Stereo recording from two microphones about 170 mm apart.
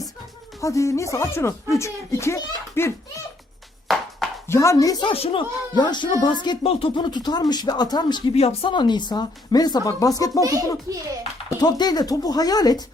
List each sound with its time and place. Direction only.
0.6 s speech: 20° left (ahead or behind)
3.8 s music: centre (ahead or behind)
4.4 s speech: 15° left (ahead or behind)
11.6 s speech: 25° left (ahead or behind)